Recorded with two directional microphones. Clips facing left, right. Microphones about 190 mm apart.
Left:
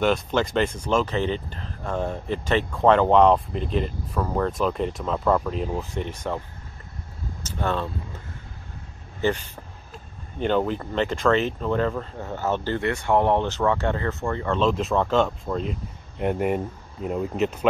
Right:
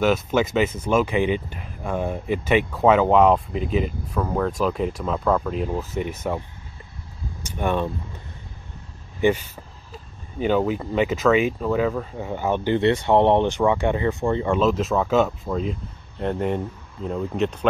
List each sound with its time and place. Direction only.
0.0 s speech: 5° right (ahead or behind)
7.4 s speech: 15° right (ahead or behind)
9.2 s speech: 15° right (ahead or behind)
10.4 s speech: 5° right (ahead or behind)
14.6 s speech: centre (ahead or behind)
16.2 s speech: 10° left (ahead or behind)